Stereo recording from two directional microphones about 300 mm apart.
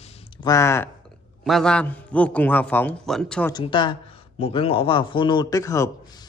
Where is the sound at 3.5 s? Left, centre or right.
Centre.